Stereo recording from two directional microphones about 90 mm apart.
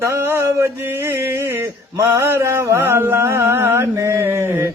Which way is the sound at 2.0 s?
30° right (ahead or behind).